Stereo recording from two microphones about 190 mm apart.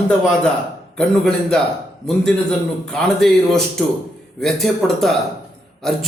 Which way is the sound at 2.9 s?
Centre (ahead or behind).